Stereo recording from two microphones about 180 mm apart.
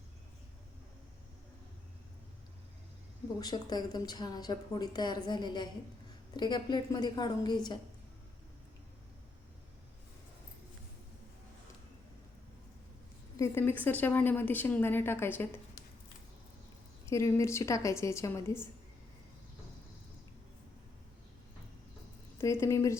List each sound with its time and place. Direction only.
3.4 s a woman's voice: 25° left (ahead or behind)
13.3 s a woman's voice: 15° left (ahead or behind)
17.1 s a woman's voice: 15° left (ahead or behind)
22.4 s a woman's voice: 15° left (ahead or behind)